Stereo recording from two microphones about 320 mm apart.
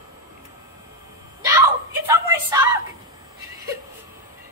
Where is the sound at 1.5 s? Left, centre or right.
Centre.